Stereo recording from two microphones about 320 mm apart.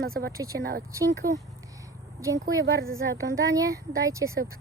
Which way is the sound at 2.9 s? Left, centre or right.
Centre.